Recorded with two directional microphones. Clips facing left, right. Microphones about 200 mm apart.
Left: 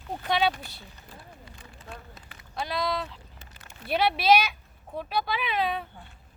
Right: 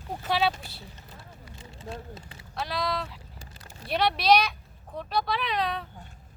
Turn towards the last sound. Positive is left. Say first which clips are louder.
# left 1 dB
turn(degrees=5)  # may be behind; listen again after turning